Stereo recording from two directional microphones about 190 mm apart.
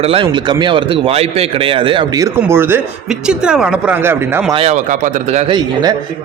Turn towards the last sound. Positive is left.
turn(degrees=-20)  # may be behind; listen again after turning